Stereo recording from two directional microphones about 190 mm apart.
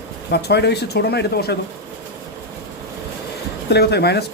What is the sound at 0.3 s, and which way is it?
Speech, 60° left (ahead or behind).